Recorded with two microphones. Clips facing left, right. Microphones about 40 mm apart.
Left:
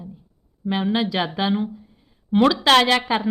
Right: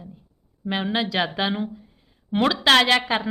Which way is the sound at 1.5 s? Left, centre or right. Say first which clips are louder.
Left 4 dB; centre.